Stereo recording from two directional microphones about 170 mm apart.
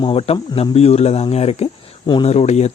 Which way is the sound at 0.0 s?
35° left (ahead or behind).